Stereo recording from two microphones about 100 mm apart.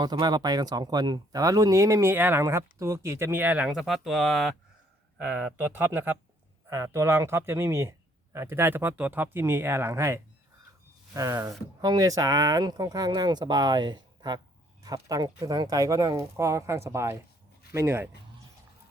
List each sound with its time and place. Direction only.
0.0 s speech: 45° right (ahead or behind); by 4.5 s centre (ahead or behind)
5.1 s speech: 10° right (ahead or behind)